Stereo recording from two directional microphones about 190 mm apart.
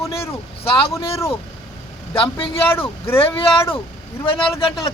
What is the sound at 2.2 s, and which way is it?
Speech, 25° left (ahead or behind).